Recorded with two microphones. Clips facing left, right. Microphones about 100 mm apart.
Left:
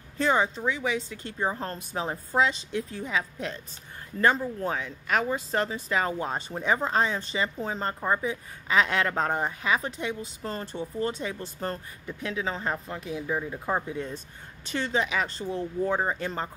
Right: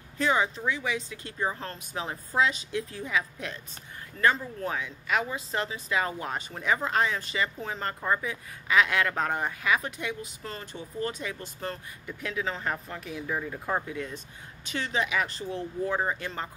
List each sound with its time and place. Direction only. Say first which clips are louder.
0.2 s speech: left 2 dB; 30° left (ahead or behind)
1.6 s speech: left 4 dB; 35° left (ahead or behind)
5.0 s speech: left 3 dB; 45° left (ahead or behind); by 13.2 s 25° left (ahead or behind)
13.3 s speech: left 1 dB; 15° left (ahead or behind)
13.8 s speech: left 2 dB; 35° left (ahead or behind)